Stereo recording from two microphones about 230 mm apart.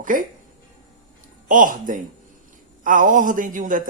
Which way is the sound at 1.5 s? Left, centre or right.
Right.